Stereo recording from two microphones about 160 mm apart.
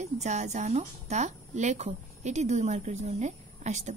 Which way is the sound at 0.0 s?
45° right (ahead or behind).